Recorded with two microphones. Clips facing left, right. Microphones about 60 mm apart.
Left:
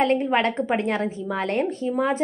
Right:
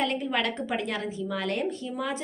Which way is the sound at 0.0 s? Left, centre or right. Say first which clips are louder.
Left 7 dB; left.